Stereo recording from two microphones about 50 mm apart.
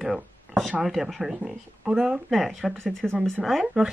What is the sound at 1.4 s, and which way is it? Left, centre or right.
Speech, centre.